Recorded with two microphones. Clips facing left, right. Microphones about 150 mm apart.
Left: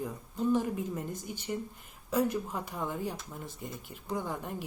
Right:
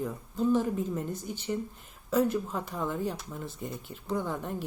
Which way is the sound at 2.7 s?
45° right (ahead or behind).